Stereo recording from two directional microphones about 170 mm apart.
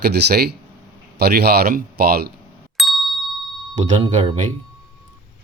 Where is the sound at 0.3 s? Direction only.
70° right (ahead or behind).